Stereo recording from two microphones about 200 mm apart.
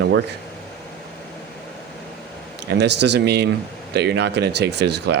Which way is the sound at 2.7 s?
60° right (ahead or behind).